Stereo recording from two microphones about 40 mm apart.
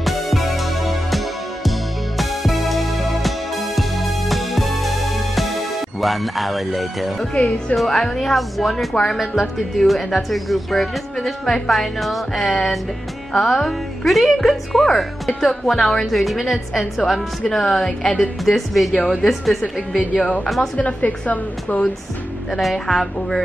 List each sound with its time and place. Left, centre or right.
0.0 s music: centre
7.7 s a woman's voice: centre
8.7 s speech: centre
9.2 s a woman's voice: centre
18.4 s a woman's voice: centre
20.2 s a woman's voice: left
22.5 s a woman's voice: centre